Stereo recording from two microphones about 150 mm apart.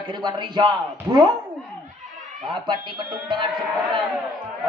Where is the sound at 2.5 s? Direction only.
30° right (ahead or behind).